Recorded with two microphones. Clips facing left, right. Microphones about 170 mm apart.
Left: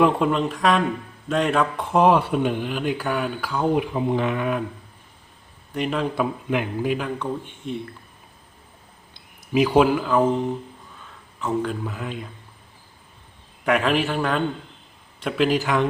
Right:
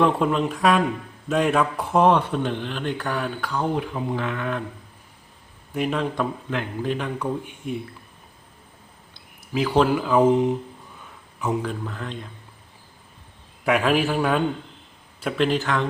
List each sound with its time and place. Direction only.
0.0 s speech: centre (ahead or behind)
3.9 s speech: 20° left (ahead or behind)
5.7 s speech: centre (ahead or behind)
7.2 s a man's voice: 10° right (ahead or behind)
9.1 s speech: 15° left (ahead or behind); by 10.2 s 5° right (ahead or behind)
11.6 s speech: 5° left (ahead or behind)
13.7 s speech: centre (ahead or behind)